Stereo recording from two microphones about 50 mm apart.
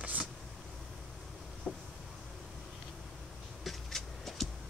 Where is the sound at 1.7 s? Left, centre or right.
Centre.